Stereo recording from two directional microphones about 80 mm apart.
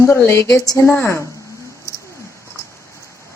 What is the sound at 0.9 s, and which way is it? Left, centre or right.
Speech, left.